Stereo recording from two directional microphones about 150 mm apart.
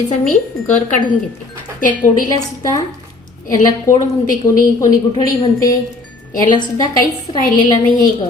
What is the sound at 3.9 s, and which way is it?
Speech, 20° left (ahead or behind).